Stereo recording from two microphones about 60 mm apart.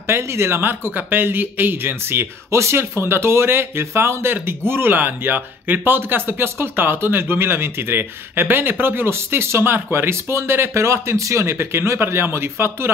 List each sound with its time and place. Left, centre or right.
0.0 s speech: right